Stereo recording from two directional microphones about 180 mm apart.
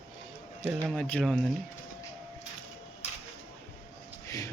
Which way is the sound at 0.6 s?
Centre (ahead or behind).